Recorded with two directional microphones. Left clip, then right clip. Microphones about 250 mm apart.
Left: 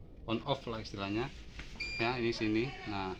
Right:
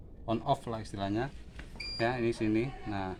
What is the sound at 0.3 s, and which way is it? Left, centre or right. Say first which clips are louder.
Speech: right 4 dB; right.